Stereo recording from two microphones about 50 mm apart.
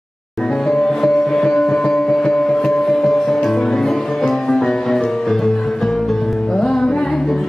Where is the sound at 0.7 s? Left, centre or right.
Centre.